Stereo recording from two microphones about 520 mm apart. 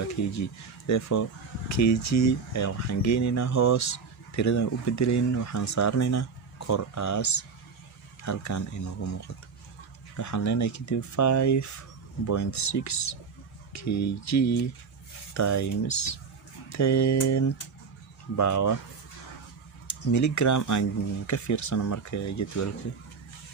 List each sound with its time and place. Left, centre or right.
0.9 s speech: left
19.9 s speech: left